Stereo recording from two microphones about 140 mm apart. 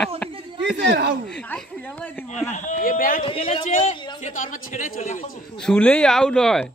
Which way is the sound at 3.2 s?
40° left (ahead or behind).